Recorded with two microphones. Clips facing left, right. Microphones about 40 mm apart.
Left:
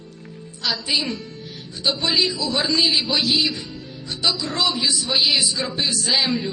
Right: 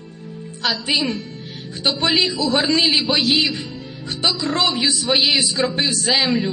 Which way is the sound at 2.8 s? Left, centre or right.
Right.